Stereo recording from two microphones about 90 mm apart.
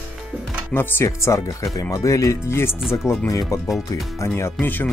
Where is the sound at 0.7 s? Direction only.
25° left (ahead or behind).